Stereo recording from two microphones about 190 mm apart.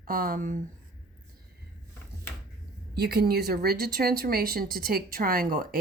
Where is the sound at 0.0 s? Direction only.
50° right (ahead or behind).